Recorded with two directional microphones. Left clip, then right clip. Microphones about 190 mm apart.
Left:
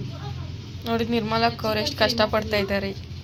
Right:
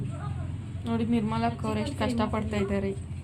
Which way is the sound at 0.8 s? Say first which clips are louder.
Left 5 dB; 10° left (ahead or behind).